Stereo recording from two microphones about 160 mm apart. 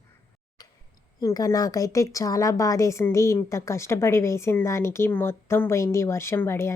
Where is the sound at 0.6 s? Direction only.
25° left (ahead or behind).